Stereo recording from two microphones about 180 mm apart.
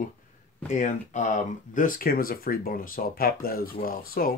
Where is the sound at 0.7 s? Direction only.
40° left (ahead or behind).